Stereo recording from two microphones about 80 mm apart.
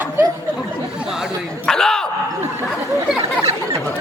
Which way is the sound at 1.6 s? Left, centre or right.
Centre.